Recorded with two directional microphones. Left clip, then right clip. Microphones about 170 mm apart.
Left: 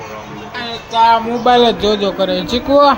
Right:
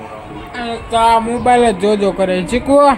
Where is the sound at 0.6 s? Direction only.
40° right (ahead or behind).